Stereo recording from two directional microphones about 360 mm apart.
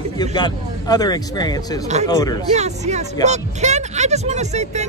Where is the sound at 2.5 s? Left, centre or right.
Centre.